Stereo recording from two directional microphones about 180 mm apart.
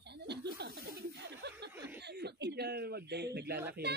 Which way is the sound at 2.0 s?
65° right (ahead or behind).